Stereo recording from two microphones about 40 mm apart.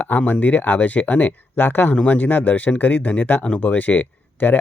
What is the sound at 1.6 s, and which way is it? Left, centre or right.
Speech, left.